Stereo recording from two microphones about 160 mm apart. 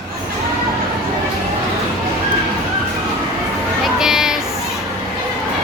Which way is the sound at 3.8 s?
5° right (ahead or behind).